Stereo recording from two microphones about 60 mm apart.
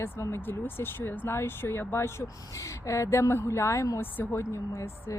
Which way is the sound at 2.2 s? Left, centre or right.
Left.